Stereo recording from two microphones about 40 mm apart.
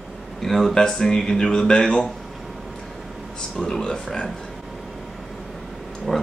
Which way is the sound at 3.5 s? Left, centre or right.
Centre.